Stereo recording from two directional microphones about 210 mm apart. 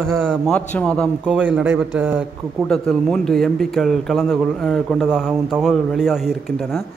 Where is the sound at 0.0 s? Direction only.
Centre (ahead or behind).